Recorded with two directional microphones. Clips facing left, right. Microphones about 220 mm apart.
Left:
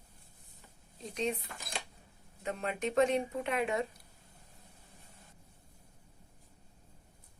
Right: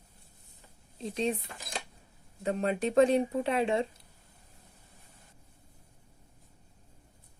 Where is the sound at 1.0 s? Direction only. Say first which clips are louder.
Right 4 dB; 30° right (ahead or behind).